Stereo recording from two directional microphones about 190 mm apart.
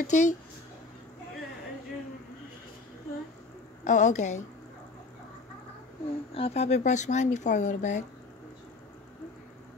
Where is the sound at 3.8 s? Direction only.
40° left (ahead or behind).